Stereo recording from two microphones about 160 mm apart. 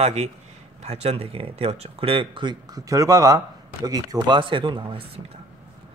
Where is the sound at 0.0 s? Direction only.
45° right (ahead or behind).